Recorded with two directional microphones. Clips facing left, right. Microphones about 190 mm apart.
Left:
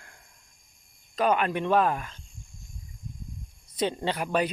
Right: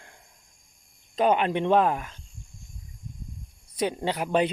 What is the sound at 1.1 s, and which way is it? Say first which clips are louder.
Speech: right 2 dB; 20° right (ahead or behind).